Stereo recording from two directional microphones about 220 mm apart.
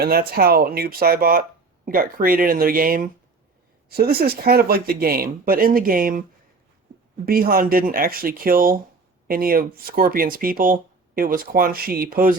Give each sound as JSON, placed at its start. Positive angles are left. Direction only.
{"t": 0.0, "sound": "speech", "side_deg": -45}
{"t": 7.3, "sound": "speech", "side_deg": -40}